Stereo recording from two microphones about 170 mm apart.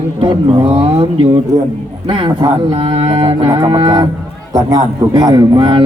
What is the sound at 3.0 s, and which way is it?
Speech, 30° right (ahead or behind).